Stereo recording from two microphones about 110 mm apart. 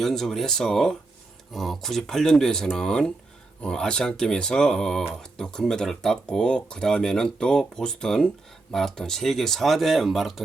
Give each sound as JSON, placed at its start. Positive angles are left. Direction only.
{"t": 0.0, "sound": "speech", "side_deg": 5}